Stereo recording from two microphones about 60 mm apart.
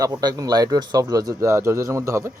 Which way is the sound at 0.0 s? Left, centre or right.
Right.